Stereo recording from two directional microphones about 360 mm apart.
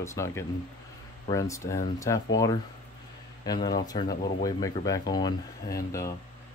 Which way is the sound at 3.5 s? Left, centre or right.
Centre.